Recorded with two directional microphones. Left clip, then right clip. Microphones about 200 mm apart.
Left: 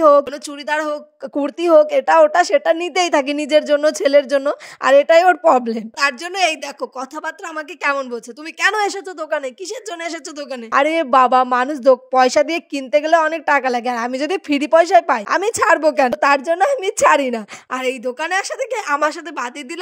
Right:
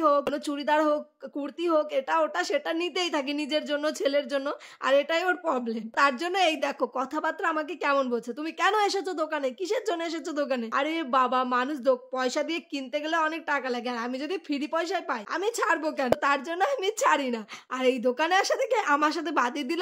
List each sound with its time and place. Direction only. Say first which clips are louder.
0.0 s a woman's voice: left 12 dB; 35° left (ahead or behind)